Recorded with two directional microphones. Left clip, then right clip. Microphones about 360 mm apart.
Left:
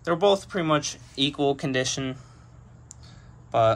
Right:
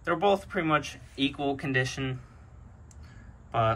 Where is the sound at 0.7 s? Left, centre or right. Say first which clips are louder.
Left 3 dB; centre.